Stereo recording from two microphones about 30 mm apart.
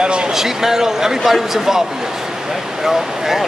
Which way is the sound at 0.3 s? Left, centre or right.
Centre.